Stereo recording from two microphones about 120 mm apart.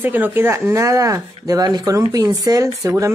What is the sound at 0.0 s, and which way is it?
Speech, 15° right (ahead or behind).